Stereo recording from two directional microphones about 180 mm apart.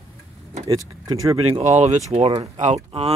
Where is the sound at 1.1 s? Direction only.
25° right (ahead or behind).